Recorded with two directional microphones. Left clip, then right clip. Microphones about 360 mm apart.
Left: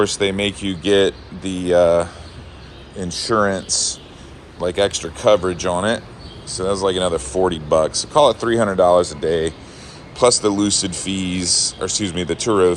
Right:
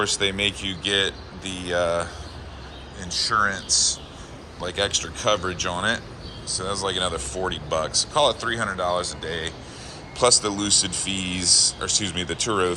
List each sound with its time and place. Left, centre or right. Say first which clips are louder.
0.0 s speech: left 4 dB; centre
3.0 s speech: left 3 dB; centre
3.7 s speech: even; centre
8.4 s speech: left 8 dB; centre
8.8 s speech: left 11 dB; centre